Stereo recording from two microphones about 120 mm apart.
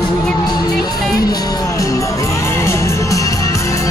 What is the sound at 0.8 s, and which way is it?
Music, 30° left (ahead or behind).